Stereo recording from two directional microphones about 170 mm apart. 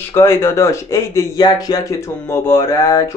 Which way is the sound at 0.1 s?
15° left (ahead or behind).